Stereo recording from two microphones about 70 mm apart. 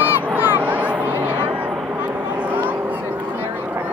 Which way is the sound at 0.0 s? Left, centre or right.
Right.